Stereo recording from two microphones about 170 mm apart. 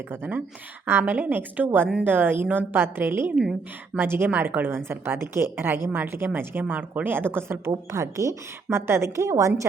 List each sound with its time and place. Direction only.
0.1 s a woman's voice: 10° right (ahead or behind)